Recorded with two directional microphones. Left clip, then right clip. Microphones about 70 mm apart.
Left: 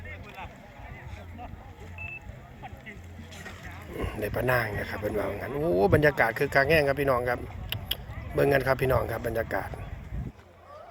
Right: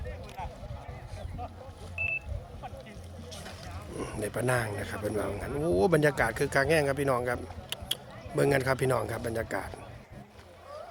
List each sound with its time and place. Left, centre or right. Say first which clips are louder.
3.9 s speech: left 3 dB; right; by 9.7 s centre